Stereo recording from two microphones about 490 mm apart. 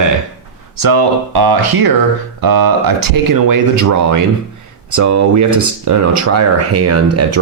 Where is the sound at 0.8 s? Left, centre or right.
Right.